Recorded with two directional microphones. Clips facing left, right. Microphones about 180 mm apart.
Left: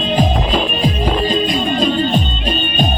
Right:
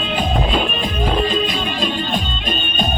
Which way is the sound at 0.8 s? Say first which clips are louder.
Left 3 dB; 35° left (ahead or behind).